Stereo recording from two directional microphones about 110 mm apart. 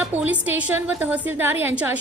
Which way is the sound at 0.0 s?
15° right (ahead or behind).